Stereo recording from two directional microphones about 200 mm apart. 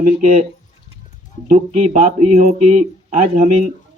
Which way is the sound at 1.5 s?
40° right (ahead or behind).